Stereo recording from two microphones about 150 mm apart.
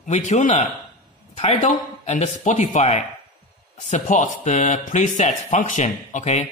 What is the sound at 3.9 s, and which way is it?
Mantra, 55° left (ahead or behind).